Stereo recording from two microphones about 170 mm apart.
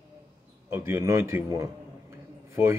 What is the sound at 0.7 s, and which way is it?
A man's voice, 15° right (ahead or behind).